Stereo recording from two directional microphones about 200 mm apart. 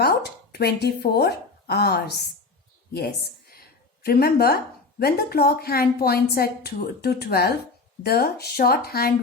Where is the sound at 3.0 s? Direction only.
50° left (ahead or behind).